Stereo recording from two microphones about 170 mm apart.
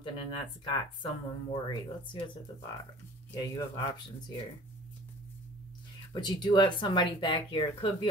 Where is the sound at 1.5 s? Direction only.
35° left (ahead or behind).